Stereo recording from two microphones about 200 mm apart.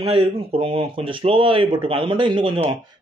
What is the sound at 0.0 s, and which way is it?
Speech, 30° right (ahead or behind).